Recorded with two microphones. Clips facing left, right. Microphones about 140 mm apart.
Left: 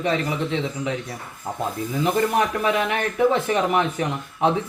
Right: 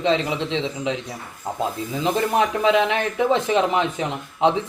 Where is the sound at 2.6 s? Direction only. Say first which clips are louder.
Right 3 dB; 20° right (ahead or behind).